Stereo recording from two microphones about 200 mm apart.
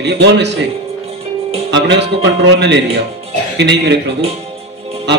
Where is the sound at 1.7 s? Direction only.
60° right (ahead or behind).